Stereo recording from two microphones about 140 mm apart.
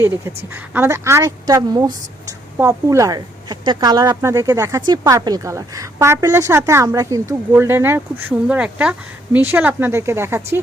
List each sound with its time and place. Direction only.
0.0 s a woman's voice: 20° right (ahead or behind)